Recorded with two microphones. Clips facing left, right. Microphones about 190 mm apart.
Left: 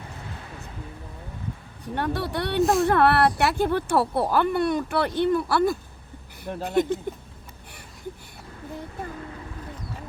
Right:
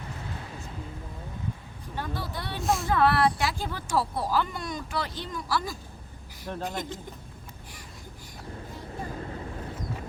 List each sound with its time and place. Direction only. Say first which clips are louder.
1.8 s speech: left 8 dB; 70° left (ahead or behind)
2.6 s speech: left 7 dB; centre (ahead or behind)
2.8 s speech: left 4 dB; 60° left (ahead or behind)